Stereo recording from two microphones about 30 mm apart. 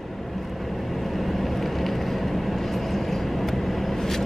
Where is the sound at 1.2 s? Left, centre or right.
Centre.